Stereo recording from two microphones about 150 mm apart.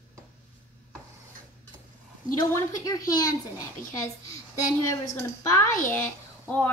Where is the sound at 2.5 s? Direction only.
25° left (ahead or behind).